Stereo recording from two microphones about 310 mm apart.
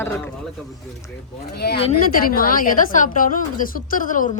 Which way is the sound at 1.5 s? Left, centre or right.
Left.